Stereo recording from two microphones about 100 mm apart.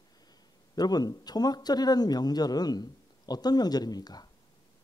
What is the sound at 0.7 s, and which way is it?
Speech, 40° left (ahead or behind).